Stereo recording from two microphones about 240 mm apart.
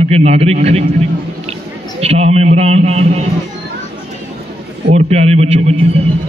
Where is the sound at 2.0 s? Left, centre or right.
Right.